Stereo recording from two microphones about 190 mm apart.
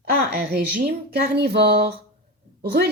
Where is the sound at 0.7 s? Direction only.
50° right (ahead or behind).